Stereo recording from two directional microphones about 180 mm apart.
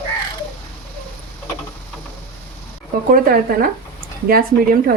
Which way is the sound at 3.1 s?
55° right (ahead or behind).